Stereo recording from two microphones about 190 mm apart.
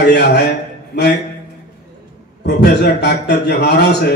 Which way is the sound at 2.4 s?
60° left (ahead or behind).